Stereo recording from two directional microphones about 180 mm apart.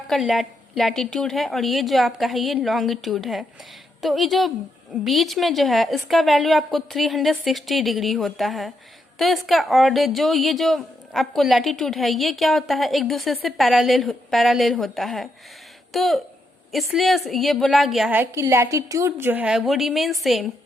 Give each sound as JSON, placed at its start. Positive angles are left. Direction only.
{"t": 0.1, "sound": "a woman's voice", "side_deg": 0}
{"t": 18.2, "sound": "a woman's voice", "side_deg": -15}